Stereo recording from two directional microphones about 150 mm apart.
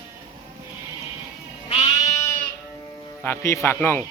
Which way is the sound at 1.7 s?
45° left (ahead or behind).